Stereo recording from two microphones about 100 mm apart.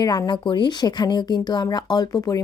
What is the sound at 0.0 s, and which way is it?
Speech, 40° left (ahead or behind).